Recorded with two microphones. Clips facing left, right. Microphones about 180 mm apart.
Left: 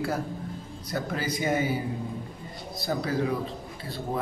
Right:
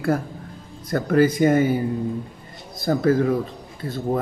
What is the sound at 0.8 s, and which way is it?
Speech, 50° right (ahead or behind).